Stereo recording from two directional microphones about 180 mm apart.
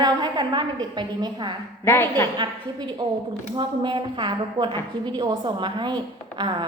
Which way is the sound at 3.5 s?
25° right (ahead or behind).